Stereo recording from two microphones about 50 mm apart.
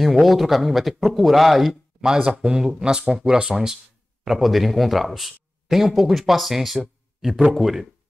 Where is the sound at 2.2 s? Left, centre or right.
Centre.